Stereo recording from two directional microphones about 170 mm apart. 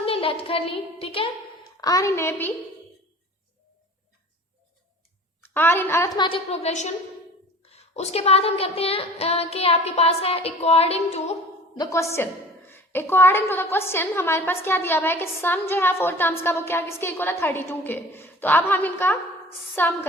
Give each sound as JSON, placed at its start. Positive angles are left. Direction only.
{"t": 0.0, "sound": "a woman's voice", "side_deg": 35}
{"t": 1.8, "sound": "a woman's voice", "side_deg": 20}
{"t": 5.4, "sound": "a woman's voice", "side_deg": 15}
{"t": 6.1, "sound": "a woman's voice", "side_deg": 30}
{"t": 11.8, "sound": "a woman's voice", "side_deg": 15}